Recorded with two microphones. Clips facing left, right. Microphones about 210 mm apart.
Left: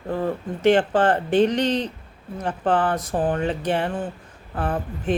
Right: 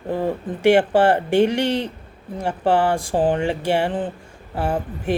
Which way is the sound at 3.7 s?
10° right (ahead or behind).